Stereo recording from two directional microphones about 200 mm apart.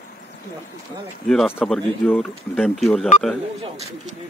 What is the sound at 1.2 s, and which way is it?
Speech, 5° left (ahead or behind).